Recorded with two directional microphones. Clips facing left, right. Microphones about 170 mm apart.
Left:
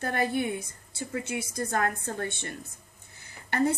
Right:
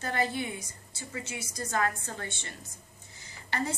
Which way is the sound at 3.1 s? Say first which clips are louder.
Left 6 dB; 55° left (ahead or behind).